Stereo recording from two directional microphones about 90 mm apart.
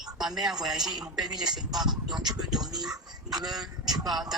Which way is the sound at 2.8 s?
45° right (ahead or behind).